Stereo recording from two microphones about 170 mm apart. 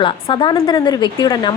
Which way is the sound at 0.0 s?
30° left (ahead or behind).